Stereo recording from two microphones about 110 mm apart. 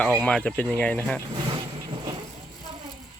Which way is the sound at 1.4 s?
50° right (ahead or behind).